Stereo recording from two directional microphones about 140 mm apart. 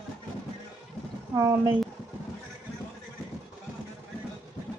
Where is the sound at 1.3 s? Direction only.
20° right (ahead or behind).